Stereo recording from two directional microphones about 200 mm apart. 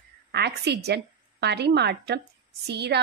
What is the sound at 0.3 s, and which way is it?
A woman's voice, 55° right (ahead or behind).